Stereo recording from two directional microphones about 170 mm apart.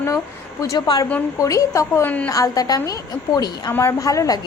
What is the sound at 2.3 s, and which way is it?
A woman's voice, 20° left (ahead or behind).